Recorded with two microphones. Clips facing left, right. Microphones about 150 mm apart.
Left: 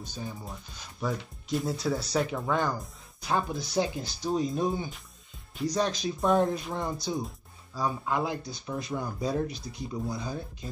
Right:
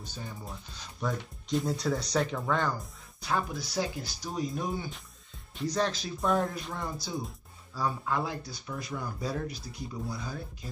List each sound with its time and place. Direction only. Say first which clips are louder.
0.0 s speech: left 4 dB; 15° left (ahead or behind)
1.0 s speech: left 1 dB; 5° left (ahead or behind)
3.3 s speech: left 2 dB; 20° left (ahead or behind)